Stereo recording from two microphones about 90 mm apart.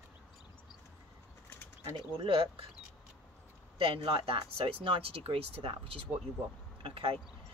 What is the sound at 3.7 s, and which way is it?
Speech, 70° right (ahead or behind).